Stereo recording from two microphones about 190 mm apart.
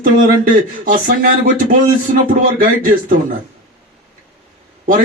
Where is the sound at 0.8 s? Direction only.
45° right (ahead or behind).